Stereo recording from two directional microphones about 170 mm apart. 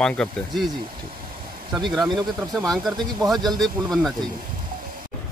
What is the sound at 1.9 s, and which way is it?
Speech, 25° right (ahead or behind).